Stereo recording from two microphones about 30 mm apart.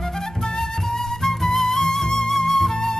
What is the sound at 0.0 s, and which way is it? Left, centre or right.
Flute, centre.